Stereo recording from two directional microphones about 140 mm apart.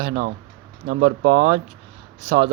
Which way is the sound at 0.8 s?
80° right.